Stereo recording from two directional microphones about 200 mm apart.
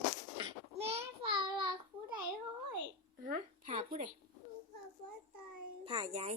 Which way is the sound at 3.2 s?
45° right (ahead or behind).